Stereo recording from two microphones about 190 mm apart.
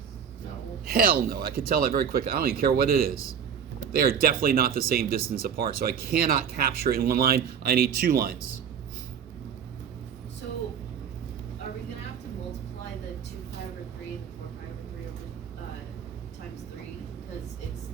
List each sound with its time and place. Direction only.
0.9 s speech: 50° right (ahead or behind)